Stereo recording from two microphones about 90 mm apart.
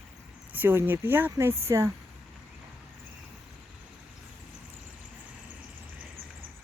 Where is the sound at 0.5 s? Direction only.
25° right (ahead or behind).